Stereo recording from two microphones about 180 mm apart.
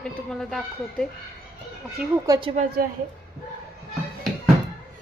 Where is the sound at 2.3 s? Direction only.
25° right (ahead or behind).